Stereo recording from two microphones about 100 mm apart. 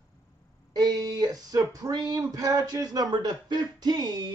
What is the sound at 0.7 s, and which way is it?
Speech, 40° right (ahead or behind).